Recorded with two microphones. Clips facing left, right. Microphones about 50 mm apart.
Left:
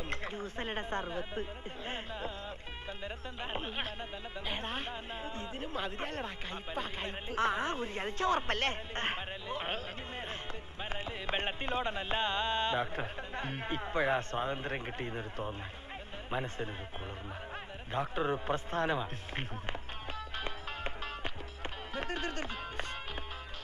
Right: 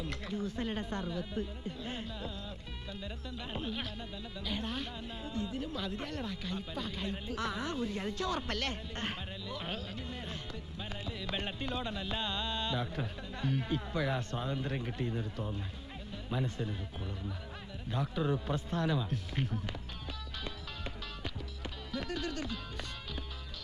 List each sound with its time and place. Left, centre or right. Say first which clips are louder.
0.0 s speech: right 1 dB; left
17.9 s speech: left 1 dB; left
20.3 s music: left 4 dB; left